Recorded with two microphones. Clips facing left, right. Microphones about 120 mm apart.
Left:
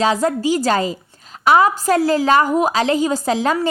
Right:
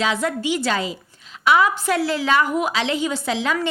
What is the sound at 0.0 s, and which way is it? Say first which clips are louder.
A woman's voice: left 5 dB; 40° left (ahead or behind).